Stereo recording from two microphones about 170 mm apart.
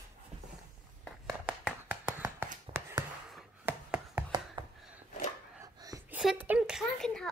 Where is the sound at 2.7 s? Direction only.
15° right (ahead or behind).